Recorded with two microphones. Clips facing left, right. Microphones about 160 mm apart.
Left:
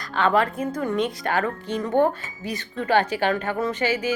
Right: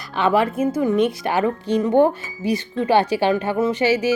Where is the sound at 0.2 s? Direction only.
15° right (ahead or behind).